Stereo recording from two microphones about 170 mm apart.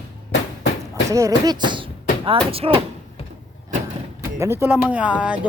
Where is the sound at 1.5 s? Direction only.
25° right (ahead or behind).